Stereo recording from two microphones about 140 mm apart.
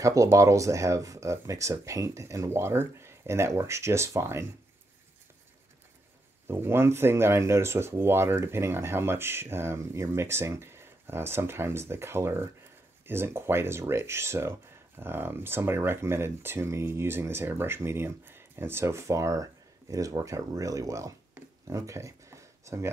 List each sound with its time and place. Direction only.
0.0 s speech: 20° right (ahead or behind)
6.4 s speech: 15° right (ahead or behind)